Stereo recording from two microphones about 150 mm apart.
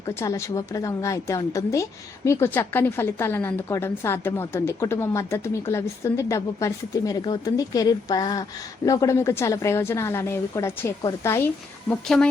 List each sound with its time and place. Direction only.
0.1 s a woman's voice: 20° left (ahead or behind)
11.9 s speech: 5° left (ahead or behind)